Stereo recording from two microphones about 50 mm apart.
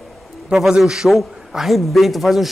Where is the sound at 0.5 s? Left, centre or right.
Centre.